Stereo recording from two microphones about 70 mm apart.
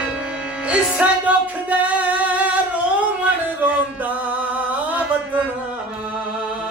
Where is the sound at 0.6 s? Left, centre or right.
Centre.